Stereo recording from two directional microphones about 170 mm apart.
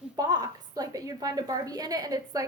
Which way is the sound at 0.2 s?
20° right (ahead or behind).